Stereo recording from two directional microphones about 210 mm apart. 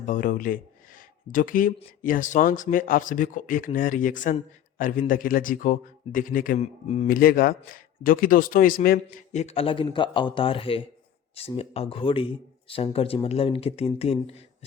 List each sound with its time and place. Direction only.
0.0 s a man's voice: 40° left (ahead or behind)